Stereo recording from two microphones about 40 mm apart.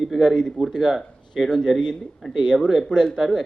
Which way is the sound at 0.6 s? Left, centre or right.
Centre.